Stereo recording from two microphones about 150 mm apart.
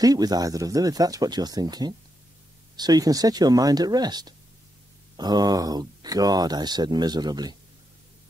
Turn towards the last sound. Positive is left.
turn(degrees=-30)  # may be behind; listen again after turning